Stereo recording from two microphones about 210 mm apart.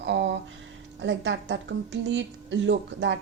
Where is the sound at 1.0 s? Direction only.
60° right (ahead or behind).